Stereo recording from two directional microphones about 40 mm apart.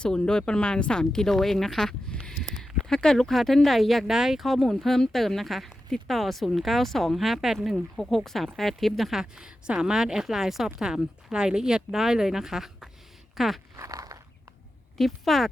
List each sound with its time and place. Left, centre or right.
0.0 s speech: centre
2.3 s a sound: centre
2.8 s speech: centre
4.0 s speech: centre
4.4 s speech: centre
7.9 s speech: centre
9.1 s speech: centre
13.3 s zipper: centre
14.9 s speech: centre